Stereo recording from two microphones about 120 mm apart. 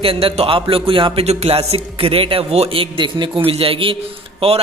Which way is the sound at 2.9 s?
45° right (ahead or behind).